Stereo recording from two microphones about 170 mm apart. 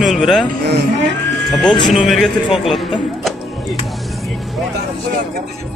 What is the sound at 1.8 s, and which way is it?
Speech, centre (ahead or behind).